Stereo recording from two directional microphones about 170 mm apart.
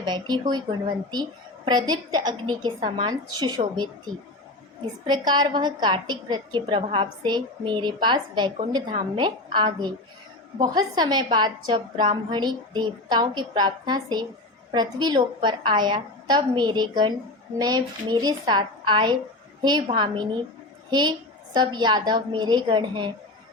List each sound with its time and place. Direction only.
0.0 s a woman's voice: 25° right (ahead or behind)
5.0 s a woman's voice: 25° right (ahead or behind)